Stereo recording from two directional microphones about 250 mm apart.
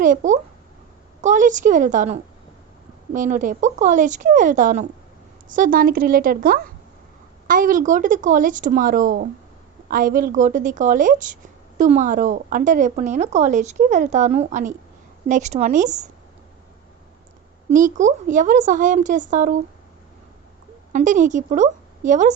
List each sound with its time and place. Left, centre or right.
0.0 s a child's voice: right
17.7 s a woman's voice: right
20.9 s a woman's voice: right